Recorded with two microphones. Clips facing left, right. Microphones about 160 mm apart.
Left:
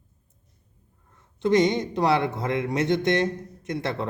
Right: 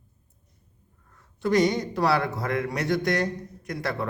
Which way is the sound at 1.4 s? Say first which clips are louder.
Left 2 dB; 20° left (ahead or behind).